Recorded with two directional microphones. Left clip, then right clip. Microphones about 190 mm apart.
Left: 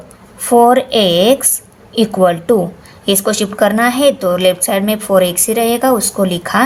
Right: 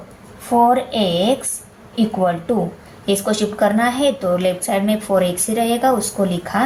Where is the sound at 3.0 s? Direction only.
45° left (ahead or behind).